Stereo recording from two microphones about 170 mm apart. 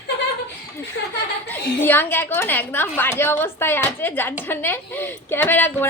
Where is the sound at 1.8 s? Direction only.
10° left (ahead or behind).